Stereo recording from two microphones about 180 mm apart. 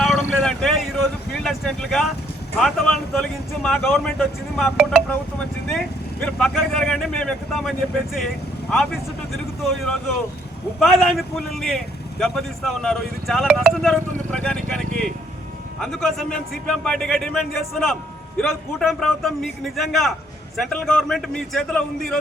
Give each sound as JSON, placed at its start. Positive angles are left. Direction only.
{"t": 0.0, "sound": "vehicle", "side_deg": 0}
{"t": 2.6, "sound": "speech", "side_deg": 0}
{"t": 9.6, "sound": "speech", "side_deg": 5}